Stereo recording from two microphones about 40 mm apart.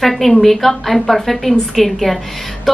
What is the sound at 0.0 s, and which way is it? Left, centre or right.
A woman's voice, centre.